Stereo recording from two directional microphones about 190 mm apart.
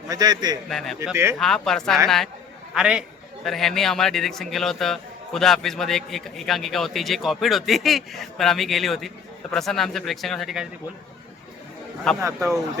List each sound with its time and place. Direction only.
0.1 s a man's voice: 20° right (ahead or behind)
0.7 s a man's voice: centre (ahead or behind)
1.0 s speech: 15° right (ahead or behind)
1.4 s a man's voice: centre (ahead or behind)
12.2 s speech: 15° right (ahead or behind)